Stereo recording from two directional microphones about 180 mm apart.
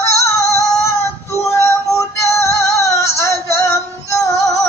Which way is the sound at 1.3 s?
15° left (ahead or behind).